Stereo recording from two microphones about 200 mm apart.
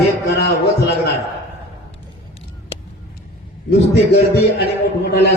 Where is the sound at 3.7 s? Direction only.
55° left (ahead or behind).